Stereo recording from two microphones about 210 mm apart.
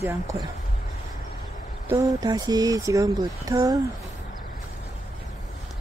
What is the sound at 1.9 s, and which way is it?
Speech, 20° right (ahead or behind).